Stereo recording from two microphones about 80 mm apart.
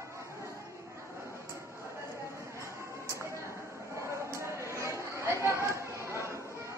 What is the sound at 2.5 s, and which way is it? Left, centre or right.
Music, right.